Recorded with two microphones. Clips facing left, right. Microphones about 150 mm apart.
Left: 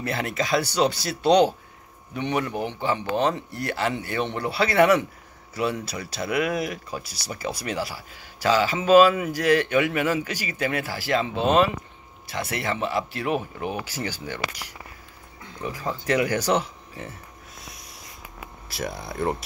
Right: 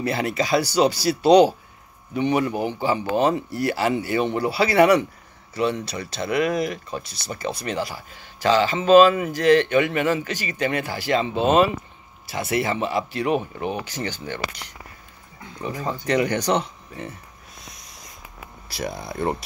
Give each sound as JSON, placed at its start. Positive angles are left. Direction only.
{"t": 0.0, "sound": "speech", "side_deg": 0}
{"t": 18.7, "sound": "speech", "side_deg": 0}